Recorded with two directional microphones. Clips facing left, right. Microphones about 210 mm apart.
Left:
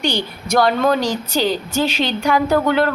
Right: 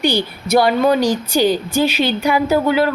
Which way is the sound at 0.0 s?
10° right (ahead or behind).